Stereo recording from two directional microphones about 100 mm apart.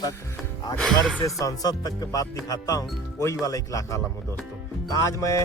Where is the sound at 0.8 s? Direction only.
5° left (ahead or behind).